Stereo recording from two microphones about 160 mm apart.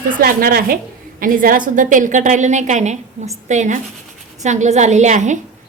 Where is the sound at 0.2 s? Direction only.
65° right (ahead or behind).